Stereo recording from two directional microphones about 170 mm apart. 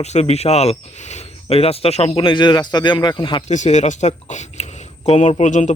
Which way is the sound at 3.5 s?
45° left (ahead or behind).